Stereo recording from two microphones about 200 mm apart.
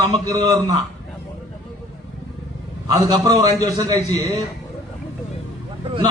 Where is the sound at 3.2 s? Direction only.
20° right (ahead or behind).